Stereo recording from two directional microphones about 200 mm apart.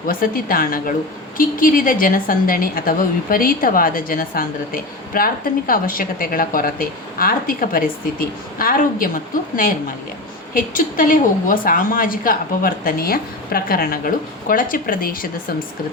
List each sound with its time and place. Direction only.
0.1 s a woman's voice: 45° left (ahead or behind)